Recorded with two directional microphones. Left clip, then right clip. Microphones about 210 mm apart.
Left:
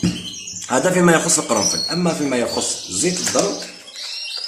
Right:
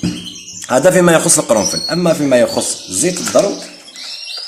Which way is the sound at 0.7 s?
40° right (ahead or behind).